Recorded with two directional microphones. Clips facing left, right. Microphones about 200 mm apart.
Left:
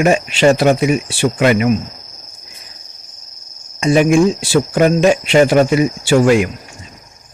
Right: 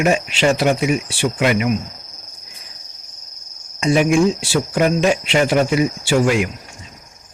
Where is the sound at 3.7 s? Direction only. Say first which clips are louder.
Left 3 dB; 45° left (ahead or behind).